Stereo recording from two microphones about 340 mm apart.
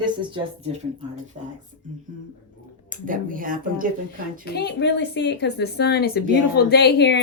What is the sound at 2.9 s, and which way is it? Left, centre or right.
Speech, right.